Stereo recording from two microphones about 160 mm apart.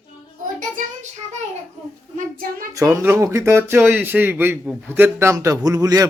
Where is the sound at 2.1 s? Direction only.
60° right (ahead or behind).